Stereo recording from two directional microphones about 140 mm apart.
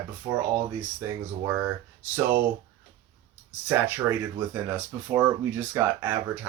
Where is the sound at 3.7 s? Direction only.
15° right (ahead or behind).